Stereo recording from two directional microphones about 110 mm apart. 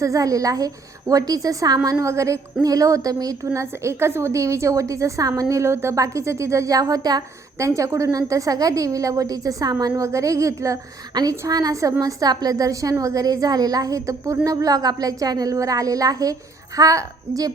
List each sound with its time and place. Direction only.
0.0 s a woman's voice: 30° right (ahead or behind)